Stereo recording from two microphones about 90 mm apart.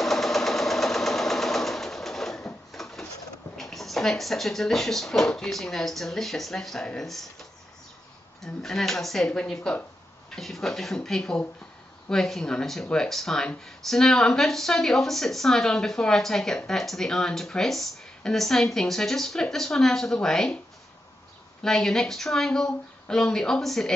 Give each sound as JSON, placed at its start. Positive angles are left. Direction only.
{"t": 0.0, "sound": "sewing machine", "side_deg": 5}
{"t": 2.7, "sound": "a sound", "side_deg": 5}
{"t": 3.5, "sound": "speech", "side_deg": 0}
{"t": 8.6, "sound": "speech", "side_deg": 5}
{"t": 21.6, "sound": "speech", "side_deg": 5}